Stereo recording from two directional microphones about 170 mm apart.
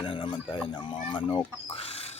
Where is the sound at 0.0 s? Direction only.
30° left (ahead or behind).